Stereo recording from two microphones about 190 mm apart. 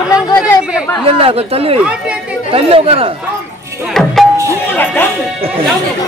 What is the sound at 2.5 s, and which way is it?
Speech, 30° right (ahead or behind).